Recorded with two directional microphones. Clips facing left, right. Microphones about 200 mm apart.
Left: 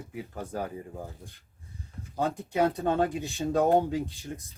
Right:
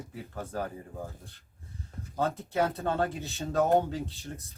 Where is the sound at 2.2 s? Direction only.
15° left (ahead or behind).